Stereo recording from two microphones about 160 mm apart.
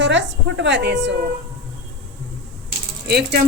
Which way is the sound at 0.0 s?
90° right.